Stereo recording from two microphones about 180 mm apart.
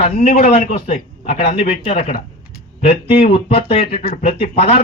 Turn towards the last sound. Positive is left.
turn(degrees=35)  # may be behind; listen again after turning